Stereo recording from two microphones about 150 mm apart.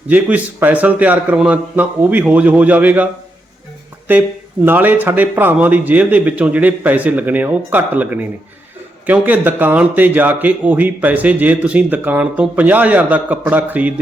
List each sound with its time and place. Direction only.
0.1 s a man's voice: 10° right (ahead or behind)
4.1 s a man's voice: 10° right (ahead or behind)